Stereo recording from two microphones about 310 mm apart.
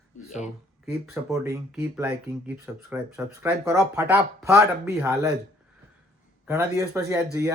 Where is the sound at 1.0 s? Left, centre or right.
Centre.